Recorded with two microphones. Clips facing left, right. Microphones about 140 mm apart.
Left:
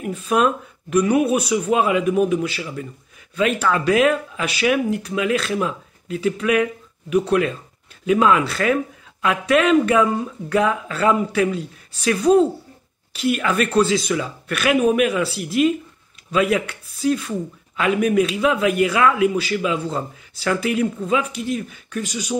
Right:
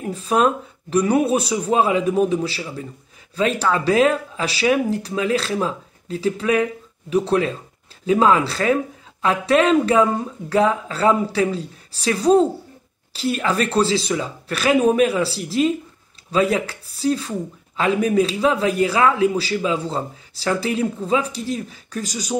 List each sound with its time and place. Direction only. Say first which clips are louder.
0.0 s speech: even; 35° right (ahead or behind)